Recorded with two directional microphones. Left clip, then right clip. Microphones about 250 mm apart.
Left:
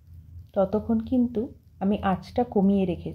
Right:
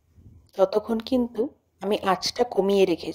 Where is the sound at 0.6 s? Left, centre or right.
Right.